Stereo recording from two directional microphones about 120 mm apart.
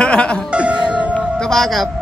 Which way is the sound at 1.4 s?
5° left (ahead or behind).